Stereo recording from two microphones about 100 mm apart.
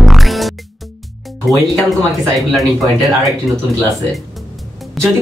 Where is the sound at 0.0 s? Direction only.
Centre (ahead or behind).